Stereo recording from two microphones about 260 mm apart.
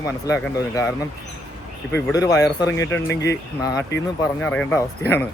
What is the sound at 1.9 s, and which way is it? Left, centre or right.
Speech, centre.